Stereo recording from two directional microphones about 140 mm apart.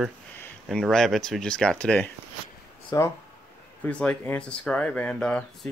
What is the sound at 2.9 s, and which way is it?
Speech, 30° left (ahead or behind).